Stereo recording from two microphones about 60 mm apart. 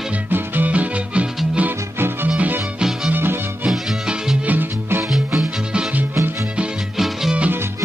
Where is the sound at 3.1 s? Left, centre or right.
Right.